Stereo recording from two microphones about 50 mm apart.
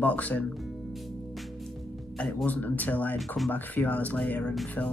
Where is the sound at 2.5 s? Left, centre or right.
Left.